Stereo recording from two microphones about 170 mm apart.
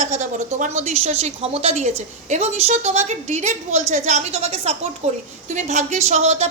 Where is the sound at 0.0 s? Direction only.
45° right (ahead or behind).